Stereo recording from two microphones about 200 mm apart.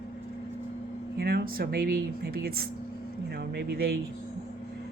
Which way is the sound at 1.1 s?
50° right (ahead or behind).